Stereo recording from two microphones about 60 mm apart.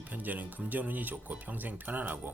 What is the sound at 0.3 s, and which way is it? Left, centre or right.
Speech, right.